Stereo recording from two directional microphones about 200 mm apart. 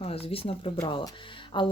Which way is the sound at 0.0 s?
30° left (ahead or behind).